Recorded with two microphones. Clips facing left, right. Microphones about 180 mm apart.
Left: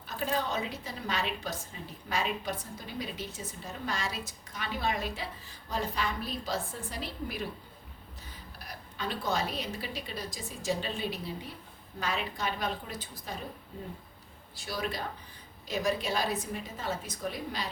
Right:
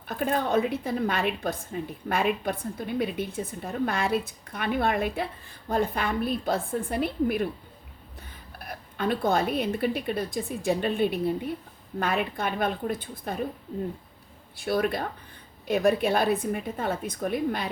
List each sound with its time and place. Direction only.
0.1 s a woman's voice: 55° right (ahead or behind)
8.5 s a woman's voice: 55° right (ahead or behind)
14.5 s a woman's voice: 55° right (ahead or behind)